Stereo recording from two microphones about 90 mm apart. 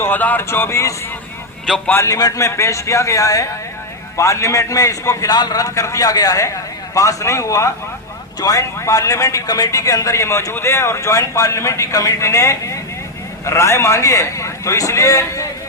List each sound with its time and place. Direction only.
0.0 s a man's voice: 20° left (ahead or behind)